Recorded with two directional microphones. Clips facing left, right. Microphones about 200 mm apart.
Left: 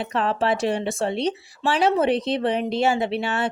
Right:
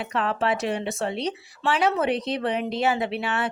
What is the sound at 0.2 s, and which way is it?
Speech, 35° left (ahead or behind).